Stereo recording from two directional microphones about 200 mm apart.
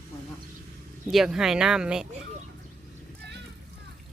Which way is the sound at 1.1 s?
Centre (ahead or behind).